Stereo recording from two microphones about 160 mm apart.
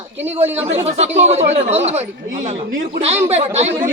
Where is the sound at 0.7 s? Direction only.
40° right (ahead or behind).